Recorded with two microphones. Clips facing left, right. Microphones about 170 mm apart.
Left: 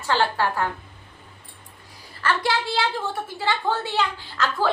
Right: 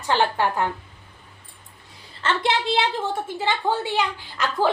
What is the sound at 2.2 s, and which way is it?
A woman's voice, 20° right (ahead or behind).